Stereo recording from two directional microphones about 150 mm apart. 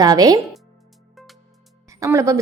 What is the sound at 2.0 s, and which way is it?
Speech, 20° right (ahead or behind).